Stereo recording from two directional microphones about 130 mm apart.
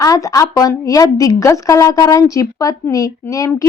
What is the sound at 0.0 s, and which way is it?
A woman's voice, 25° left (ahead or behind).